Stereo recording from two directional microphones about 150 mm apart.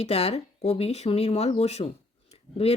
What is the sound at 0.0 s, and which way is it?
Speech, 40° left (ahead or behind).